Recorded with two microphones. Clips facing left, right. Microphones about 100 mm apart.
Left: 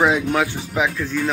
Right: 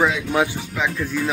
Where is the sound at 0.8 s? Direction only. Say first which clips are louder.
Left 3 dB; 15° left (ahead or behind).